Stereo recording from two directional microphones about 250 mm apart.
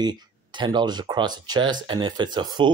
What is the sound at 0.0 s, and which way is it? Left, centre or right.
Speech, centre.